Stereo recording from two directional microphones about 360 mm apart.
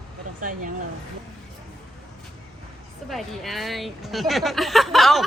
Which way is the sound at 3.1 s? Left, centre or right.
Centre.